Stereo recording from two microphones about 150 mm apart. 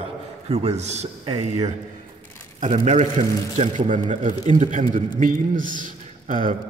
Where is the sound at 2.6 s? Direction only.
55° right (ahead or behind).